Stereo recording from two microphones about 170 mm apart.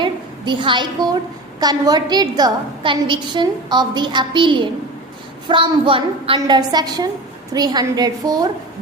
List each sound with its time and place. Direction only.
0.0 s a woman's voice: 30° right (ahead or behind)